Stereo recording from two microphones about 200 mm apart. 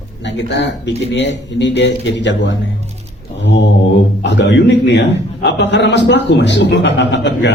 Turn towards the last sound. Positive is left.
turn(degrees=60)  # may be behind; listen again after turning